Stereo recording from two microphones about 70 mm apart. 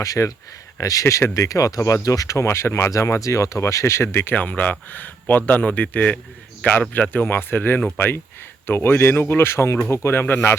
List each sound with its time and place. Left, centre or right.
0.0 s speech: left
2.9 s speech: left
4.4 s a man's voice: left